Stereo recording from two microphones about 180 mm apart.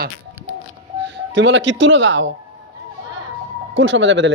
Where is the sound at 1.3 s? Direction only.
90° right.